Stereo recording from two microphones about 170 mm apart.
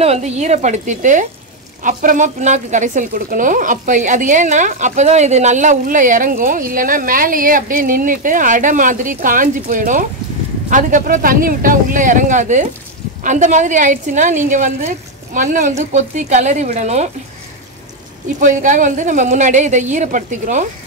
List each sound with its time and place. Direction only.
0.0 s a woman's voice: 40° right (ahead or behind)
18.4 s a woman's voice: 50° right (ahead or behind)